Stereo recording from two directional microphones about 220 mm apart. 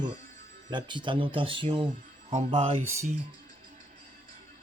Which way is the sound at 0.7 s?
20° right (ahead or behind).